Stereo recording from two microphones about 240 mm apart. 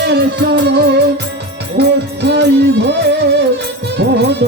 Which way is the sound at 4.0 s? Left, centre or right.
Right.